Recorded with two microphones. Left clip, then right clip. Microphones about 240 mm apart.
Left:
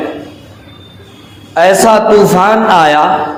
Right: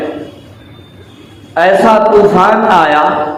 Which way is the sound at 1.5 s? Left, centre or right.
Left.